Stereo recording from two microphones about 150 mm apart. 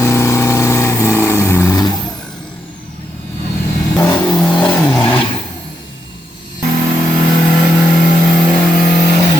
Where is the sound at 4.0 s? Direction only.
15° left (ahead or behind).